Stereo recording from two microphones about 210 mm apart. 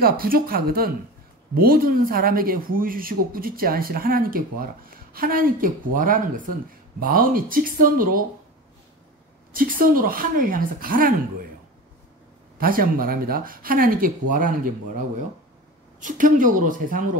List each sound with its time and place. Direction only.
0.0 s a man's voice: 45° right (ahead or behind)
9.5 s a woman's voice: 40° right (ahead or behind)
12.5 s a man's voice: 45° right (ahead or behind)
16.0 s a woman's voice: 40° right (ahead or behind)